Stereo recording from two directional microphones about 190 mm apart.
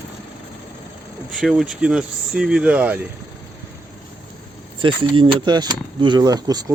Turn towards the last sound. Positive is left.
turn(degrees=-20)  # may be behind; listen again after turning